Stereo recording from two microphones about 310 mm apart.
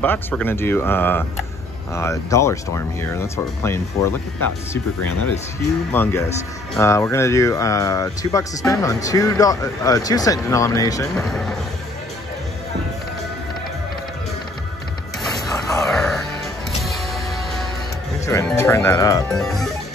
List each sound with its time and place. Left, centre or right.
0.0 s speech: centre
4.1 s speech: left
5.9 s speech: centre
15.2 s music: centre